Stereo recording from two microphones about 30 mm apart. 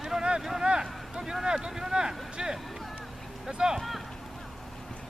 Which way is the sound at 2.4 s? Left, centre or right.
Centre.